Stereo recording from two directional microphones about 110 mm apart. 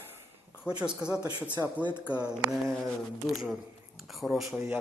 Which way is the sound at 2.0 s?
20° left (ahead or behind).